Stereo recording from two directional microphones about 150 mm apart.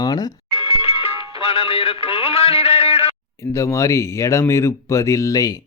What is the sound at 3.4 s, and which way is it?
Speech, 20° left (ahead or behind).